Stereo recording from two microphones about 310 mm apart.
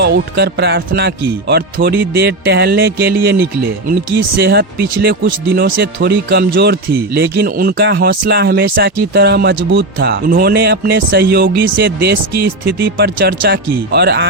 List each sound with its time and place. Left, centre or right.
0.0 s speech: right